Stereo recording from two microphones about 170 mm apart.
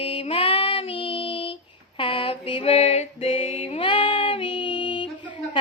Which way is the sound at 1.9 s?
30° left (ahead or behind).